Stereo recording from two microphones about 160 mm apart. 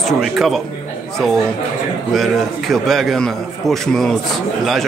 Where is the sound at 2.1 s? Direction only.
Centre (ahead or behind).